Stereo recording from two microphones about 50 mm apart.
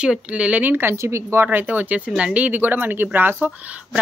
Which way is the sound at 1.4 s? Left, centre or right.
Right.